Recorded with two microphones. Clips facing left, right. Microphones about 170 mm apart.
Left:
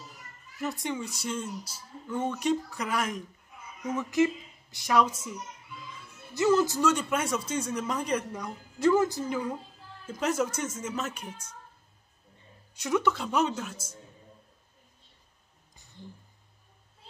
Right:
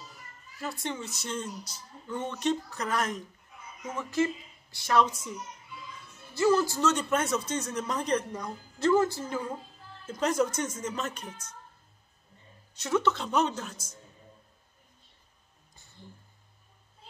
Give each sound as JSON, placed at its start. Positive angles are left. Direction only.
{"t": 0.6, "sound": "a woman's voice", "side_deg": 15}
{"t": 6.3, "sound": "speech", "side_deg": 20}
{"t": 12.7, "sound": "speech", "side_deg": 15}